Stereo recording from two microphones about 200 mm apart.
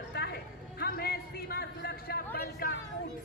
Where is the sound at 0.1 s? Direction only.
50° left (ahead or behind).